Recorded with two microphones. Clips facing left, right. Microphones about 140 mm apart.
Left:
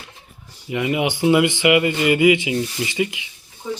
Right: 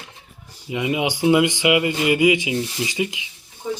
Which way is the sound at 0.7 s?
15° right (ahead or behind).